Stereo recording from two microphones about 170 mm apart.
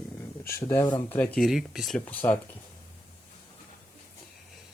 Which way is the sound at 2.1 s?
10° left (ahead or behind).